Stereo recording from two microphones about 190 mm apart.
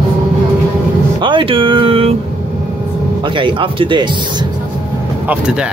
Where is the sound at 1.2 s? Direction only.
25° right (ahead or behind).